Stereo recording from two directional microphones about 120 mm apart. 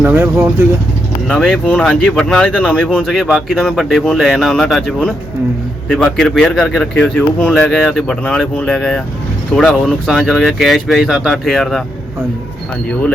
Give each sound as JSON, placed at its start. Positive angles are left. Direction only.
{"t": 0.0, "sound": "speech", "side_deg": -20}
{"t": 1.3, "sound": "speech", "side_deg": 5}